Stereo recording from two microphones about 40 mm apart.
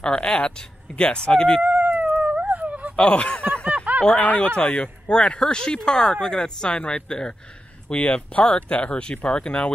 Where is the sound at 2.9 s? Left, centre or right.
Left.